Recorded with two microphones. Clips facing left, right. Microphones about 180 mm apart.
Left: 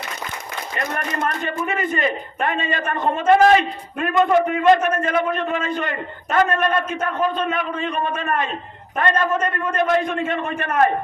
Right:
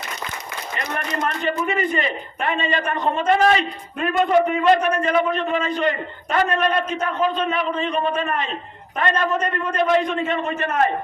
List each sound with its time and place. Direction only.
0.8 s a man's voice: 45° left (ahead or behind)